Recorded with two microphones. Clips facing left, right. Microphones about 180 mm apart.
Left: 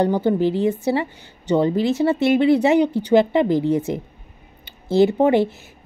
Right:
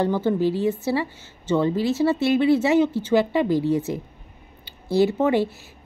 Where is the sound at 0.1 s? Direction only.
20° left (ahead or behind).